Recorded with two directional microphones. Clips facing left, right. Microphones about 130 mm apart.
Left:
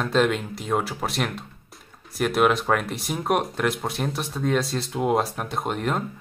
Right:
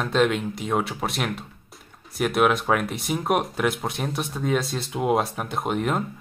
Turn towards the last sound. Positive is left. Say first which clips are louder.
# right 1 dB
turn(degrees=0)  # may be behind; listen again after turning